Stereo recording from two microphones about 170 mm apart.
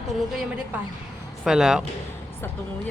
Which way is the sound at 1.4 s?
5° right (ahead or behind).